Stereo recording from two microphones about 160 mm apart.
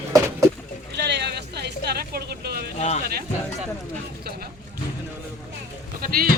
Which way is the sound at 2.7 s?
45° left (ahead or behind).